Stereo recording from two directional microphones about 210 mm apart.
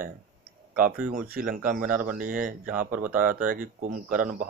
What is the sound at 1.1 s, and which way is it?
Speech, 45° right (ahead or behind).